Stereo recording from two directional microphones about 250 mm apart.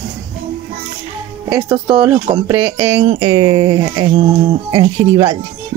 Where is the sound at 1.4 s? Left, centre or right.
Centre.